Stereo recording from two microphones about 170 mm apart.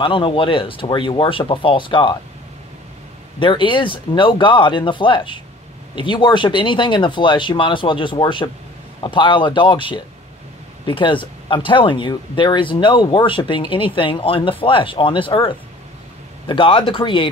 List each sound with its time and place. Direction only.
0.0 s speech: 30° left (ahead or behind)
3.3 s speech: 30° left (ahead or behind)